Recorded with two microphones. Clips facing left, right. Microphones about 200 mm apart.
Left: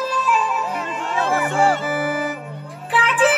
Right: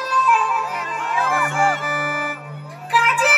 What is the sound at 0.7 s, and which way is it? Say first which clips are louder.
Music: left 1 dB; 30° left (ahead or behind).